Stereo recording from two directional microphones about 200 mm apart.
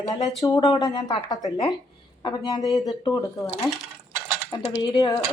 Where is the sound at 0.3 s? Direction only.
20° left (ahead or behind).